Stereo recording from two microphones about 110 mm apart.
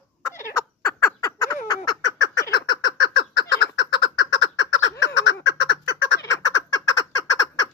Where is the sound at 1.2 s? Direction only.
35° left (ahead or behind).